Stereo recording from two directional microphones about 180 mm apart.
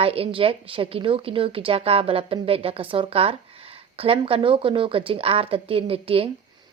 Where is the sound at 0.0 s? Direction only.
30° right (ahead or behind).